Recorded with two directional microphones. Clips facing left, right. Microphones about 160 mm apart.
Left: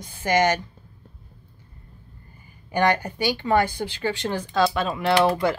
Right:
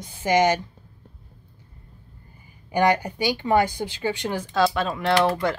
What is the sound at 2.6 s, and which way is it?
Speech, 10° right (ahead or behind).